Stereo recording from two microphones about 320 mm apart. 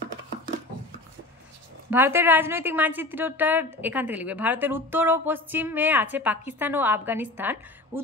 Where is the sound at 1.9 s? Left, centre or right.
Centre.